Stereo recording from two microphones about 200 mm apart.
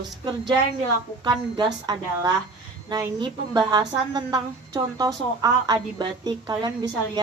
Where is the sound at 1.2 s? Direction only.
20° right (ahead or behind).